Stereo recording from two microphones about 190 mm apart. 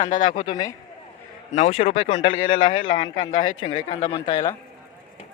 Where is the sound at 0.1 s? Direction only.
45° left (ahead or behind).